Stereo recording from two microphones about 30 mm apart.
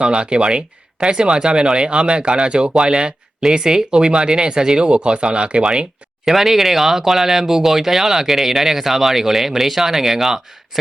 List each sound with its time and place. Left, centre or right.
0.0 s speech: right
6.2 s speech: centre